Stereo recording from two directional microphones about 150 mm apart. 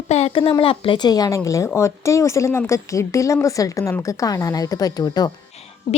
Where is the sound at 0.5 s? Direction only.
35° left (ahead or behind).